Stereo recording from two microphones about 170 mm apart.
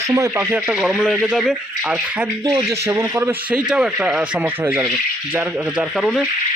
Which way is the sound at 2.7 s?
15° right (ahead or behind).